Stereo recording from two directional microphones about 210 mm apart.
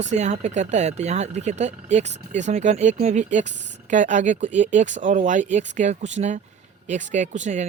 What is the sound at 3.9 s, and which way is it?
Speech, 35° right (ahead or behind).